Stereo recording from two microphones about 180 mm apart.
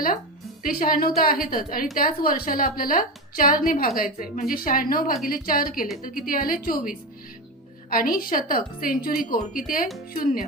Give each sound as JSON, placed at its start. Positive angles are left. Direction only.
{"t": 0.6, "sound": "a woman's voice", "side_deg": 50}